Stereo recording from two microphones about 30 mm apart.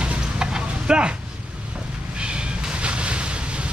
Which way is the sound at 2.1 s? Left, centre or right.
Right.